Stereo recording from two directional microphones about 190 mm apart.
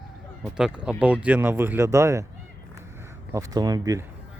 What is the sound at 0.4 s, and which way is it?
Speech, 5° right (ahead or behind).